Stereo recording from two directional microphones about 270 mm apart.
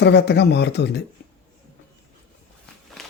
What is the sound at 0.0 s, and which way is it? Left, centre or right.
Speech, left.